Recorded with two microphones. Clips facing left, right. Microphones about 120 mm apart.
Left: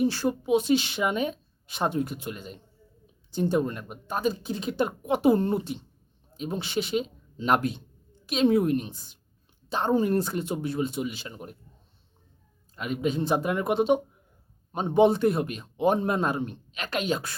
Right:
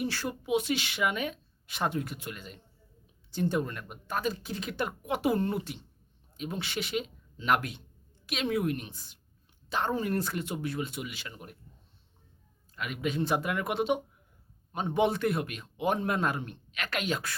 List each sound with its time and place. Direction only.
0.3 s speech: 30° left (ahead or behind)
8.9 s a woman's voice: 20° left (ahead or behind)
12.7 s speech: 30° left (ahead or behind)